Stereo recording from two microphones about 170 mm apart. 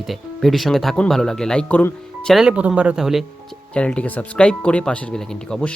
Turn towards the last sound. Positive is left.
turn(degrees=5)  # may be behind; listen again after turning